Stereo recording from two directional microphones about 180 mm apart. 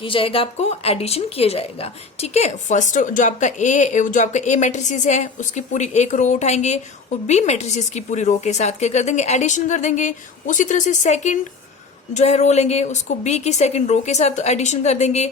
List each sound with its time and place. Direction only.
0.0 s a woman's voice: 30° left (ahead or behind)